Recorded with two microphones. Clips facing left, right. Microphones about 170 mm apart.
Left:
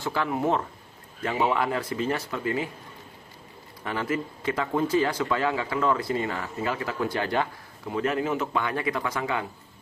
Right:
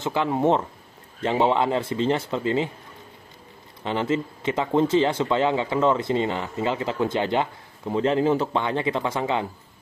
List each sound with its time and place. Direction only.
0.0 s speech: 20° right (ahead or behind)
3.8 s speech: 25° right (ahead or behind)